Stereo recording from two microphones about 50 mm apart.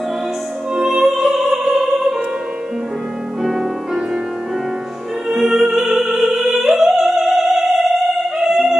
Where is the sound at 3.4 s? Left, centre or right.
Centre.